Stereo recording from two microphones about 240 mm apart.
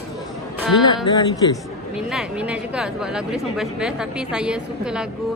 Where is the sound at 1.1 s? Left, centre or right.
Centre.